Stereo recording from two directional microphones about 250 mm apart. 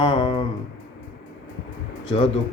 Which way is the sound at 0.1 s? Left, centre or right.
Centre.